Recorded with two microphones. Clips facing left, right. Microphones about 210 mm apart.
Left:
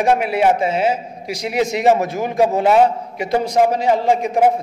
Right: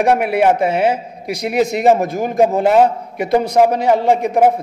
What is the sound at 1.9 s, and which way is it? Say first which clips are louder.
A man's voice: right 2 dB; 50° right (ahead or behind).